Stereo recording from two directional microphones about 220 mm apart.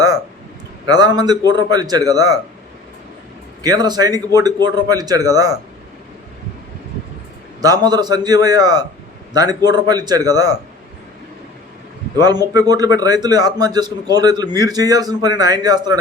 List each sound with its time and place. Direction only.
0.9 s a man's voice: 20° right (ahead or behind)
3.6 s a man's voice: 15° right (ahead or behind)
7.6 s a man's voice: 15° right (ahead or behind)
12.2 s a man's voice: 20° right (ahead or behind)